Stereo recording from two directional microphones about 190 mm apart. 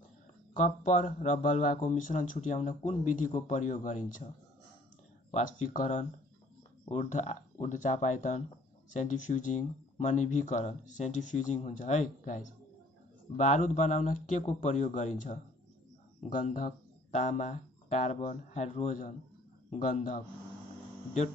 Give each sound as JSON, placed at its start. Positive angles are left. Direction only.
{"t": 0.8, "sound": "speech", "side_deg": 40}
{"t": 5.3, "sound": "speech", "side_deg": 40}
{"t": 13.4, "sound": "speech", "side_deg": 40}